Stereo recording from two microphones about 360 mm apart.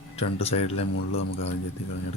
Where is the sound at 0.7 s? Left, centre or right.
Left.